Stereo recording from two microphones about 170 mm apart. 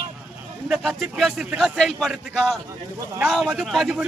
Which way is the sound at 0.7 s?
Centre (ahead or behind).